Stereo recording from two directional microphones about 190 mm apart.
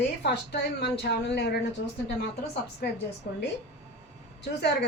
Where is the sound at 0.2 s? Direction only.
65° left (ahead or behind).